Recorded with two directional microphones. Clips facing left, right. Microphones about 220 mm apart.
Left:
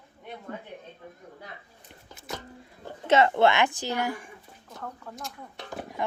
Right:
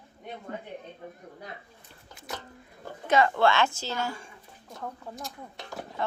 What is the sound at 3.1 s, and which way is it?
A woman's voice, 25° left (ahead or behind).